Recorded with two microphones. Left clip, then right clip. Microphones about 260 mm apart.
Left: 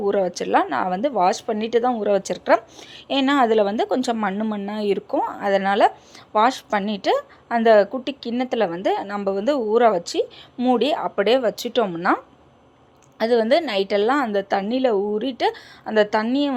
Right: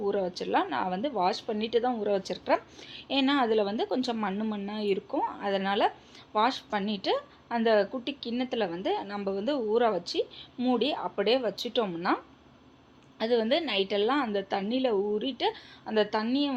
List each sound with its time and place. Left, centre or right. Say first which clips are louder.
0.0 s speech: left 9 dB; left